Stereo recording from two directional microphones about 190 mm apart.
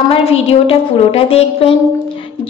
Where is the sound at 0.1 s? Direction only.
30° left (ahead or behind).